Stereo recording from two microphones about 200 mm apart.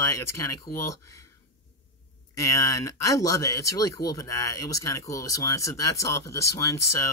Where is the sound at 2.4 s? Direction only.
15° left (ahead or behind).